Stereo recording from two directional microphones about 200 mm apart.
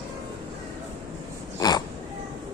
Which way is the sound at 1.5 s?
20° left (ahead or behind).